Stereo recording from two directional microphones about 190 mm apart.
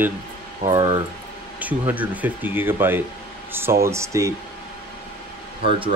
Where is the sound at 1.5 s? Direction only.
10° right (ahead or behind).